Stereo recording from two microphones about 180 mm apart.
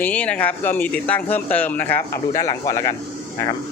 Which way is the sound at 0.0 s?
10° left (ahead or behind).